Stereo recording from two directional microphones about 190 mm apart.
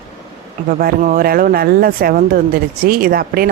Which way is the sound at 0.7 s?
50° right (ahead or behind).